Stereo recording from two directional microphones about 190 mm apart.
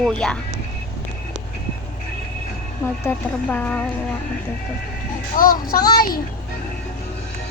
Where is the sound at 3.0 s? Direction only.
10° left (ahead or behind).